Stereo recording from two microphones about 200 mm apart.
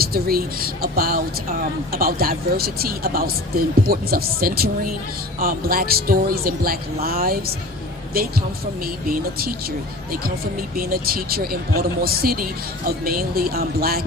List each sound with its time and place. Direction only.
0.0 s speech: 50° right (ahead or behind)
9.0 s speech: 45° right (ahead or behind)
10.8 s speech: 50° right (ahead or behind)